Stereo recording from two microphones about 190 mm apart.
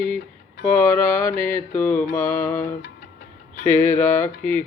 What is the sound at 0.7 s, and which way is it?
Mantra, 10° left (ahead or behind).